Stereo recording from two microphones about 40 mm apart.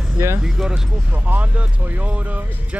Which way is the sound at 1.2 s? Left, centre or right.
Right.